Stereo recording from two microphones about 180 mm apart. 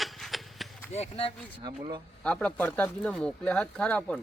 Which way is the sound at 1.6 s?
25° right (ahead or behind).